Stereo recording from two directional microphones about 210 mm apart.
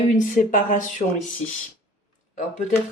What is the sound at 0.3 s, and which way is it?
Speech, 40° left (ahead or behind).